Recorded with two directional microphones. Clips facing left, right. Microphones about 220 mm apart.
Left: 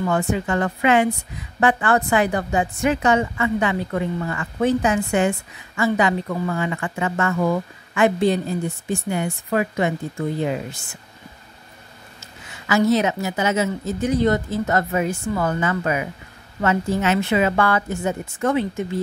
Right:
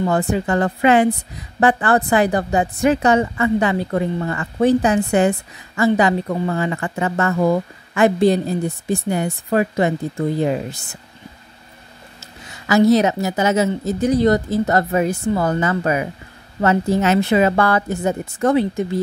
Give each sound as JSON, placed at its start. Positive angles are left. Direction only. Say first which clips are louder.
{"t": 0.0, "sound": "a woman's voice", "louder": "right 3 dB", "side_deg": -35}
{"t": 12.2, "sound": "a woman's voice", "louder": "right 2 dB", "side_deg": -35}